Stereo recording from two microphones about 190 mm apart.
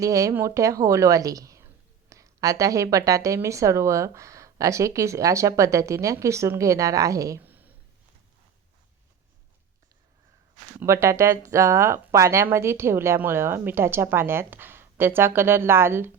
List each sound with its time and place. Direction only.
0.0 s a woman's voice: 15° right (ahead or behind)
10.8 s a woman's voice: 15° right (ahead or behind)